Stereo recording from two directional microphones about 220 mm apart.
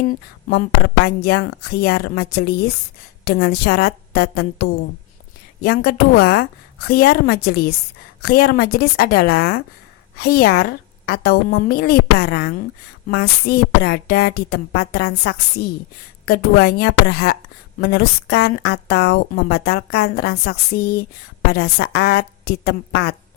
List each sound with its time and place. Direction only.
0.0 s a woman's voice: 40° left (ahead or behind)
5.6 s a woman's voice: 45° left (ahead or behind)